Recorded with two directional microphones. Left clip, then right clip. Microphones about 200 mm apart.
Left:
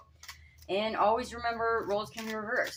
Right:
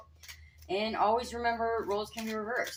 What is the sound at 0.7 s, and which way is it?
Speech, 35° left (ahead or behind).